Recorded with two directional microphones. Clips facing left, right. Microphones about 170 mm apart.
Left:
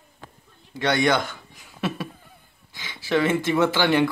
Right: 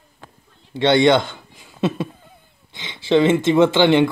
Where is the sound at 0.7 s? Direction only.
25° right (ahead or behind).